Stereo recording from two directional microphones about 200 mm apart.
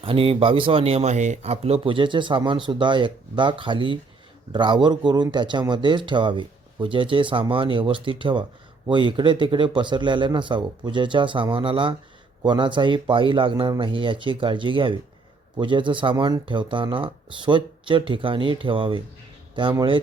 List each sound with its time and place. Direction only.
0.0 s speech: 30° right (ahead or behind)